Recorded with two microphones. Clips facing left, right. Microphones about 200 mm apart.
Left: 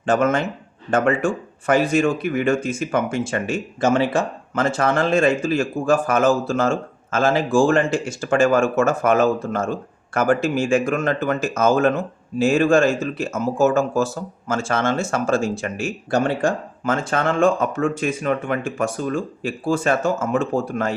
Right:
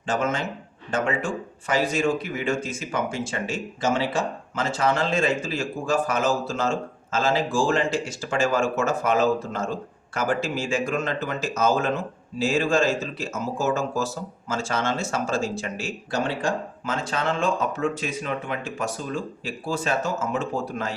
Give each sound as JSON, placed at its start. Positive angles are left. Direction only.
{"t": 0.0, "sound": "speech", "side_deg": 55}